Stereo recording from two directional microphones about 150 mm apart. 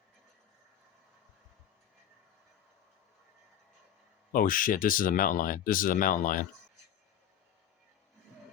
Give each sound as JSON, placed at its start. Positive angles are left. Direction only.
{"t": 4.3, "sound": "speech", "side_deg": 65}